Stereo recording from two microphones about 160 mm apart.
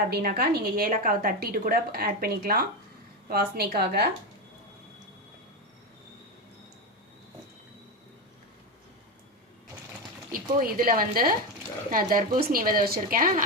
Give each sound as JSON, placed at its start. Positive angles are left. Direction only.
{"t": 0.1, "sound": "a woman's voice", "side_deg": -70}
{"t": 3.8, "sound": "speech", "side_deg": -90}
{"t": 10.3, "sound": "a woman's voice", "side_deg": -65}